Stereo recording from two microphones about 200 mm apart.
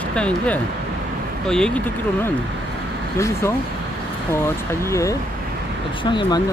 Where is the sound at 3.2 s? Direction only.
15° left (ahead or behind).